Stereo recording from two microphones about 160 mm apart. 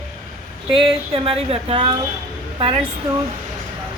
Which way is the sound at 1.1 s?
35° right (ahead or behind).